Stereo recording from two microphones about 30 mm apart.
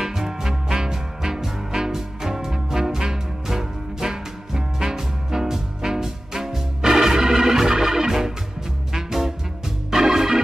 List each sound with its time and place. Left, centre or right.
0.0 s music: centre
9.8 s organ: centre